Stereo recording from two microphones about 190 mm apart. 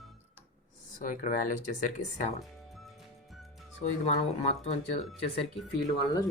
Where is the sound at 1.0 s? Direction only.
40° left (ahead or behind).